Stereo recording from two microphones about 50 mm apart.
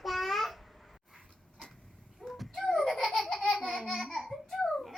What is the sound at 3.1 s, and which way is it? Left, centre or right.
Laughter, centre.